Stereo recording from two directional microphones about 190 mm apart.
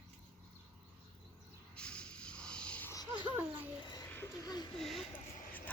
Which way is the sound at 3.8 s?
20° left (ahead or behind).